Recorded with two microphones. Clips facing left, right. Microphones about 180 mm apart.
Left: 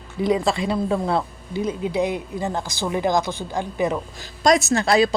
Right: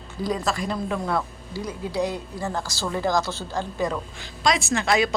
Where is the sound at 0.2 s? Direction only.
25° left (ahead or behind).